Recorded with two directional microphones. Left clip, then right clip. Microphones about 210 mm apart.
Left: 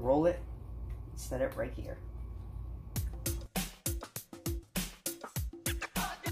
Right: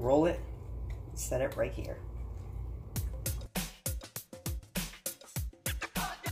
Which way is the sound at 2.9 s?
Centre (ahead or behind).